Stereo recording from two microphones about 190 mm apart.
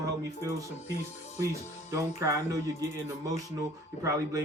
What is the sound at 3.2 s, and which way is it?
Speech, 15° right (ahead or behind).